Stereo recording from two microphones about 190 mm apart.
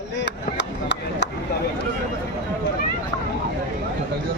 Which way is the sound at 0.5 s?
65° left (ahead or behind).